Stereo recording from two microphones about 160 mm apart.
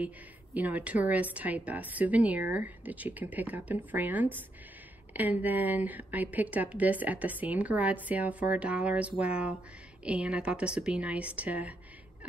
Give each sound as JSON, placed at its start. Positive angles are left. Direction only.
{"t": 0.6, "sound": "speech", "side_deg": -10}